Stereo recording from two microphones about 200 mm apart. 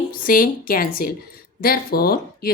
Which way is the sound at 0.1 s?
45° left (ahead or behind).